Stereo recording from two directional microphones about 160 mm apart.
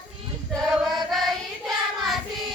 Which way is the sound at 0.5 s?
Centre (ahead or behind).